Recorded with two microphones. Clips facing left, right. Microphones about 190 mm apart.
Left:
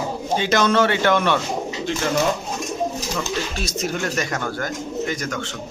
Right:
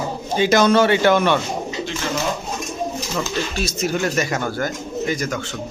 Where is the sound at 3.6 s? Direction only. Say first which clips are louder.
Right 3 dB; 5° right (ahead or behind).